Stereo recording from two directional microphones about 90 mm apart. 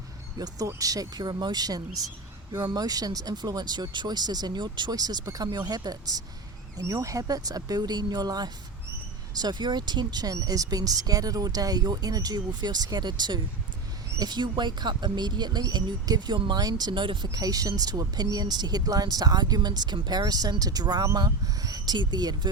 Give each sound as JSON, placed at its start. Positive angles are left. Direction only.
{"t": 0.3, "sound": "speech", "side_deg": -45}
{"t": 1.2, "sound": "speech", "side_deg": -60}